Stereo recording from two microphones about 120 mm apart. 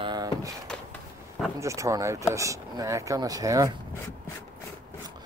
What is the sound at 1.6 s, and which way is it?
Speech, 25° right (ahead or behind).